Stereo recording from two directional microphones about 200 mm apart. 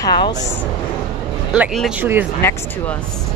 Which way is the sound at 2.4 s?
10° left (ahead or behind).